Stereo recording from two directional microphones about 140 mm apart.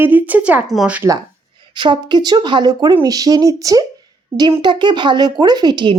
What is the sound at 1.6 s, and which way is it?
A woman's voice, 35° right (ahead or behind).